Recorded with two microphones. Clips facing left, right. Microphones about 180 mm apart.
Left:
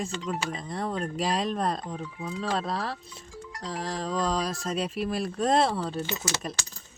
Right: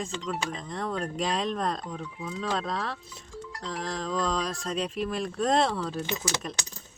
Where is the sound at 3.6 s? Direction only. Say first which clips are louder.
Left 1 dB; 35° left (ahead or behind).